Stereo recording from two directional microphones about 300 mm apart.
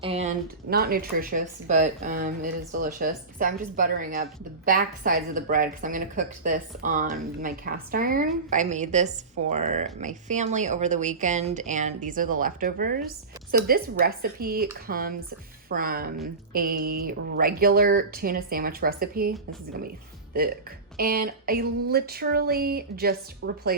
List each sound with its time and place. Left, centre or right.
0.0 s a woman's voice: right
20.9 s speech: right